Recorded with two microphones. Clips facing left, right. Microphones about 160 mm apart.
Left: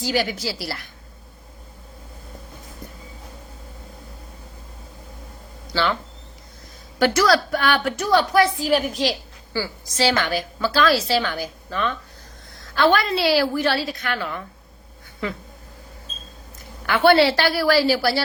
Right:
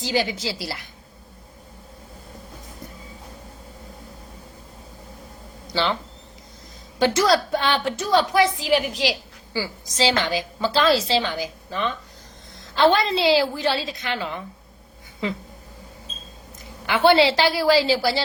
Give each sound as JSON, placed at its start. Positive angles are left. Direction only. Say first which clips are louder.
{"t": 0.0, "sound": "a woman's voice", "louder": "left 1 dB", "side_deg": -20}
{"t": 5.7, "sound": "speech", "louder": "left 1 dB", "side_deg": -20}
{"t": 7.0, "sound": "a woman's voice", "louder": "left 1 dB", "side_deg": -25}
{"t": 9.5, "sound": "a woman's voice", "louder": "left 1 dB", "side_deg": -15}
{"t": 16.8, "sound": "a woman's voice", "louder": "left 1 dB", "side_deg": -15}